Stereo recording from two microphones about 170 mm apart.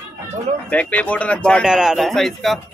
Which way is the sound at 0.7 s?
10° left (ahead or behind).